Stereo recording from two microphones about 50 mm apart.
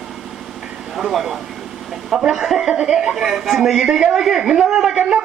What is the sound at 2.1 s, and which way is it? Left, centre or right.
Music, centre.